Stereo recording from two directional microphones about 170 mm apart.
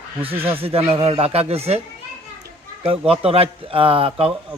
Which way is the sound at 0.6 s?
35° right (ahead or behind).